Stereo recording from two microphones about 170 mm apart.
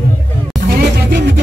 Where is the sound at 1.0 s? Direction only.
90° right.